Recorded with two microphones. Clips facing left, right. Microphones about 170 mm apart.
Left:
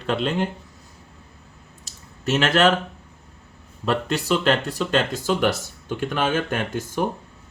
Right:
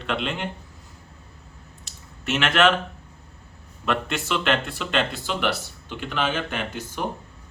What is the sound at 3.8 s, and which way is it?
Speech, 35° left (ahead or behind).